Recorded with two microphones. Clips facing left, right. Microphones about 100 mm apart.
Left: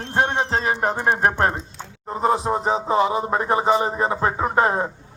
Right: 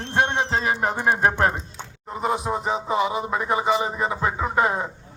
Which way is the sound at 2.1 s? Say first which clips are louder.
Left 4 dB; 35° left (ahead or behind).